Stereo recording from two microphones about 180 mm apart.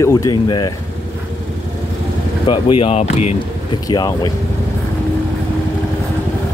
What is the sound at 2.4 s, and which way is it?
Speech, 30° left (ahead or behind).